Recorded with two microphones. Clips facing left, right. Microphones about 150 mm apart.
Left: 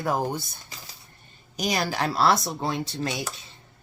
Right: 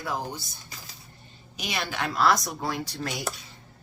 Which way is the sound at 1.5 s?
40° left (ahead or behind).